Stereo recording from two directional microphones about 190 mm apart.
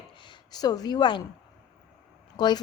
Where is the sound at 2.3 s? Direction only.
20° left (ahead or behind).